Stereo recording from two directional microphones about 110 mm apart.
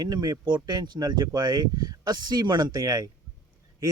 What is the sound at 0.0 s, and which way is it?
Speech, 35° right (ahead or behind).